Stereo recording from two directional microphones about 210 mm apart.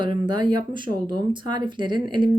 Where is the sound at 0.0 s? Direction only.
20° right (ahead or behind).